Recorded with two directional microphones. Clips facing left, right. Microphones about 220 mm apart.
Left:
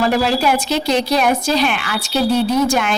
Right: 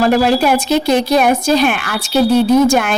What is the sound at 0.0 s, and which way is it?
A woman's voice, 50° right (ahead or behind).